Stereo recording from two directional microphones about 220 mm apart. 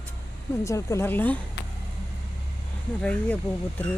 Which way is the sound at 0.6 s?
15° left (ahead or behind).